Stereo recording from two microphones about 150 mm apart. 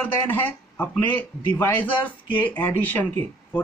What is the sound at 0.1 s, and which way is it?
A man's voice, 15° left (ahead or behind).